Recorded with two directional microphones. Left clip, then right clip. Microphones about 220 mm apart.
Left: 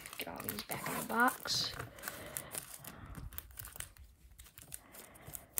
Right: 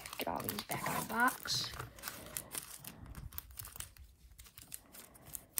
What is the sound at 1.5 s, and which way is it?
Speech, 15° left (ahead or behind).